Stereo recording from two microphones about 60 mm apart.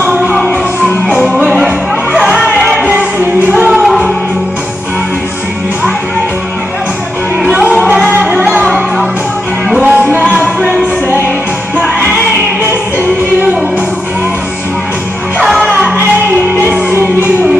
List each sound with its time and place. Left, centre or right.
0.0 s music: right
0.8 s music: centre
2.8 s music: centre
3.8 s music: centre
7.8 s music: centre
9.8 s music: right
15.4 s music: centre